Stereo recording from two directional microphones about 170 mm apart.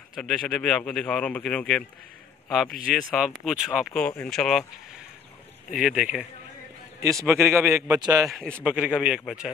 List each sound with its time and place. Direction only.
0.1 s speech: centre (ahead or behind)
5.8 s speech: 5° right (ahead or behind)
7.2 s a man's voice: 15° right (ahead or behind)
8.3 s speech: 5° left (ahead or behind)
8.6 s speech: 5° right (ahead or behind)